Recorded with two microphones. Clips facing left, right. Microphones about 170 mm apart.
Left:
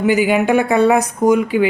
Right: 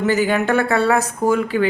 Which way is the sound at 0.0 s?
10° left (ahead or behind).